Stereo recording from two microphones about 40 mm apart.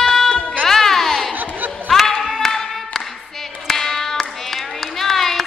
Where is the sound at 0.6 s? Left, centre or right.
Centre.